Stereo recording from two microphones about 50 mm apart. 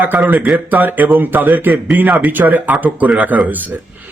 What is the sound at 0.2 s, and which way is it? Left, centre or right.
Speech, right.